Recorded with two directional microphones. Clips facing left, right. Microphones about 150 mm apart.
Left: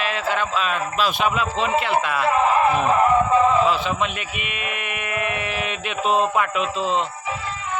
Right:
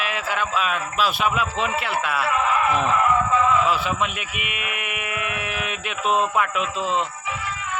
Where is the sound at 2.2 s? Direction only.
35° left (ahead or behind).